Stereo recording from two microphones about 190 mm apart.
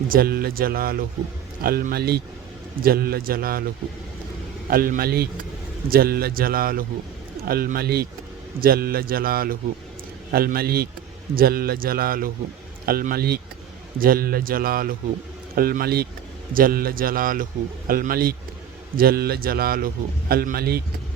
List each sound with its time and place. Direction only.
0.1 s a man's voice: 50° right (ahead or behind)
4.7 s a man's voice: 50° right (ahead or behind)